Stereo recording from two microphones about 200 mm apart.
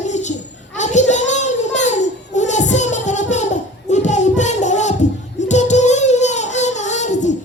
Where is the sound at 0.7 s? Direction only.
35° left (ahead or behind).